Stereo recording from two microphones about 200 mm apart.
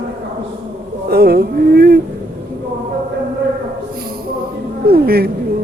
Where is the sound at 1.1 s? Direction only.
50° right (ahead or behind).